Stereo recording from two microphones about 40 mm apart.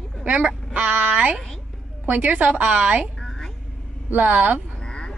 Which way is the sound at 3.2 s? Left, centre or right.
Centre.